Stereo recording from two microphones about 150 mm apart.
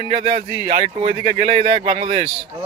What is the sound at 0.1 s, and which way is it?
A man's voice, 45° right (ahead or behind).